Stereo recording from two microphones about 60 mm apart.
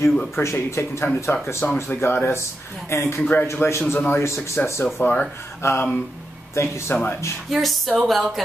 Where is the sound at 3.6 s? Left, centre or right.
Left.